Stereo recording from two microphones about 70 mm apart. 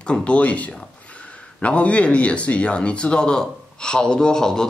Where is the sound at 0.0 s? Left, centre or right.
Centre.